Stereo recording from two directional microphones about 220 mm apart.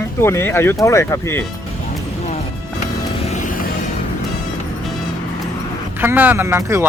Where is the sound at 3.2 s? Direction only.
35° left (ahead or behind).